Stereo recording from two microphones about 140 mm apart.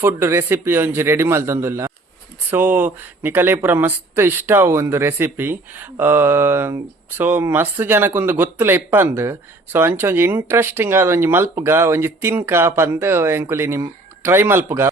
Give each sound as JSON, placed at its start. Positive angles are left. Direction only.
{"t": 0.0, "sound": "speech", "side_deg": -20}